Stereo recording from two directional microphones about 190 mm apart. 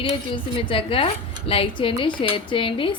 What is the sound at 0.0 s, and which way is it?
A woman's voice, 25° left (ahead or behind).